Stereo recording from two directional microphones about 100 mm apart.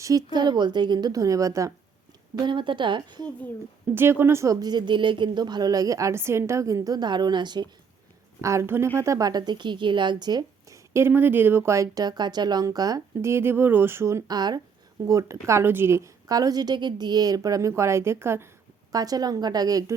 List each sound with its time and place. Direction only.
0.0 s a woman's voice: 35° right (ahead or behind)
2.4 s a woman's voice: 55° right (ahead or behind)
3.9 s speech: 25° right (ahead or behind)
4.6 s a woman's voice: 50° right (ahead or behind)
8.4 s a woman's voice: 30° right (ahead or behind)
10.9 s a woman's voice: 25° right (ahead or behind)
13.3 s speech: 20° right (ahead or behind)
14.3 s a woman's voice: 40° right (ahead or behind)
15.0 s a woman's voice: 30° right (ahead or behind)
18.9 s a woman's voice: 40° right (ahead or behind)